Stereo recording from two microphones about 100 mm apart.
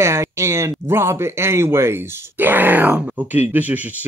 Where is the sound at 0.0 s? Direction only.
30° right (ahead or behind).